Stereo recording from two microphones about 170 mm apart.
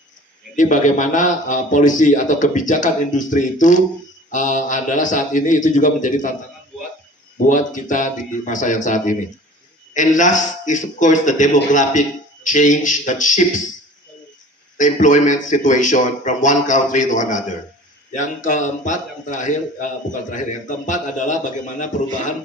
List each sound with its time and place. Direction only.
0.6 s a man's voice: 50° left (ahead or behind)
7.3 s a man's voice: 50° left (ahead or behind)
14.8 s a man's voice: 45° left (ahead or behind)